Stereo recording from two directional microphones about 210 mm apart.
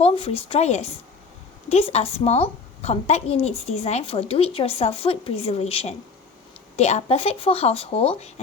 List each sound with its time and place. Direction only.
0.0 s a woman's voice: 30° left (ahead or behind)